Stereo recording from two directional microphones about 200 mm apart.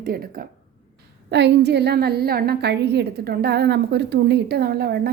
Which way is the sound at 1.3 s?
60° right (ahead or behind).